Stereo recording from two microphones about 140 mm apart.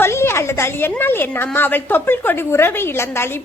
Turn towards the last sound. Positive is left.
turn(degrees=15)  # may be behind; listen again after turning